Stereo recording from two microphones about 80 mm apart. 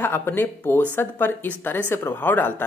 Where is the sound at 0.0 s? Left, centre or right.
Left.